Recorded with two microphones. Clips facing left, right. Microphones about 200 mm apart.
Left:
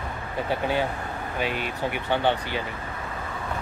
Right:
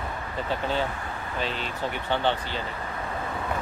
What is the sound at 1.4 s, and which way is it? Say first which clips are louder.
Speech: left 2 dB; 10° left (ahead or behind).